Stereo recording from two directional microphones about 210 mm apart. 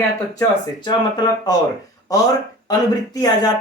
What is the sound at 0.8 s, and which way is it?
Speech, 20° left (ahead or behind).